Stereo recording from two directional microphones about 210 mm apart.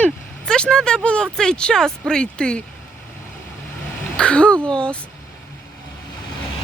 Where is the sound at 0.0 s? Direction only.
5° left (ahead or behind).